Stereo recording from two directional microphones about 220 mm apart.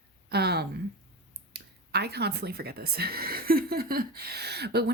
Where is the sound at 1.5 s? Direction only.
50° right (ahead or behind).